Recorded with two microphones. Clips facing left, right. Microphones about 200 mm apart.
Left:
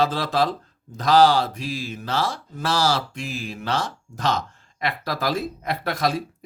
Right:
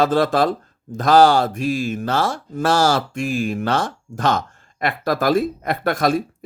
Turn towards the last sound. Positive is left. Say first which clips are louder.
# right 5 dB
turn(degrees=-50)  # may be behind; listen again after turning